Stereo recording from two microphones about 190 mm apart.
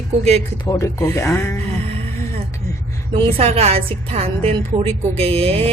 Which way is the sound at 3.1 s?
30° right (ahead or behind).